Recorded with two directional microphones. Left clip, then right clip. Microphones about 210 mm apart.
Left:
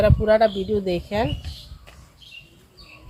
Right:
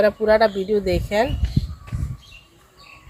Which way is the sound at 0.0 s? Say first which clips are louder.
Right 1 dB; 35° right (ahead or behind).